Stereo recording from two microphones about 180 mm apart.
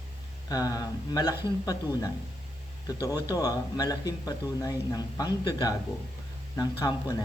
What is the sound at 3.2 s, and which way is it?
Speech, 20° left (ahead or behind).